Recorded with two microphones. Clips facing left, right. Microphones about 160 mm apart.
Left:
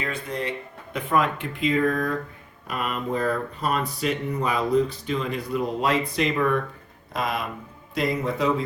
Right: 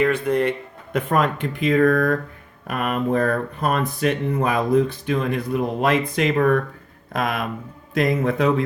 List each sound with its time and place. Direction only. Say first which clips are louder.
0.0 s speech: right 11 dB; 60° right (ahead or behind)
0.9 s speech: right 3 dB; 45° right (ahead or behind)